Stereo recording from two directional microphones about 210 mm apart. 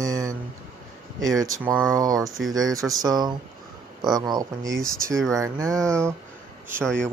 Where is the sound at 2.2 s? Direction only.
Centre (ahead or behind).